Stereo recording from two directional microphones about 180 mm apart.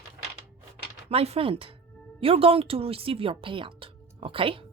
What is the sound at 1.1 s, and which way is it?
Speech, 35° right (ahead or behind).